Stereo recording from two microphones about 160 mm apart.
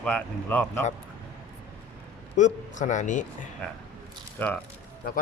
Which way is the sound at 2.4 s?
50° left (ahead or behind).